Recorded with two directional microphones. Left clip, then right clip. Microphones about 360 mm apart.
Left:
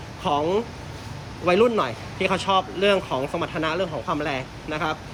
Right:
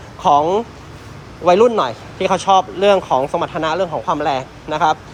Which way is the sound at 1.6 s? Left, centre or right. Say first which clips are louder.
Right 7 dB; centre.